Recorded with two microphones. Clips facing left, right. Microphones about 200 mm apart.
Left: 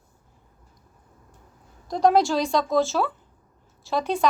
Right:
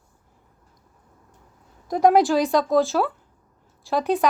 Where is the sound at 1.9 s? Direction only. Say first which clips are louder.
Right 3 dB; 10° right (ahead or behind).